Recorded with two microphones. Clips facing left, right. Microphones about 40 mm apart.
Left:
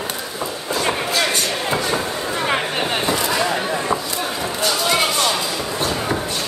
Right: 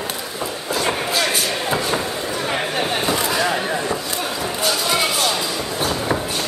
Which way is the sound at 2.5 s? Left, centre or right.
Centre.